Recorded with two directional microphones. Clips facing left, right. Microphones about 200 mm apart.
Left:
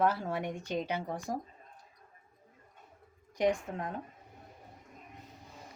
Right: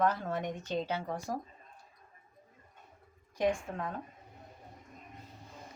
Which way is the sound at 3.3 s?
20° left (ahead or behind).